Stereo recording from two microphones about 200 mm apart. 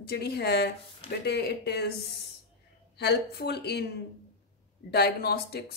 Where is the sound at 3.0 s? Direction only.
55° left (ahead or behind).